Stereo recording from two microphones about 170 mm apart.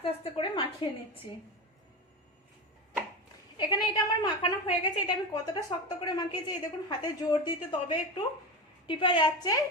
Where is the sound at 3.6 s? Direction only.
25° left (ahead or behind).